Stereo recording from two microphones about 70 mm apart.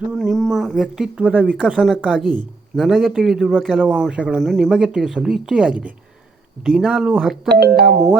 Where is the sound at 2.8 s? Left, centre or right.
Centre.